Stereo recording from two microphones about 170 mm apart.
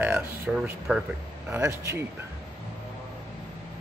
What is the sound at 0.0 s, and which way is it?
Speech, 10° right (ahead or behind).